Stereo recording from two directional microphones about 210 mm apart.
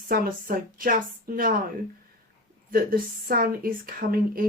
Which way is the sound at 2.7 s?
45° right (ahead or behind).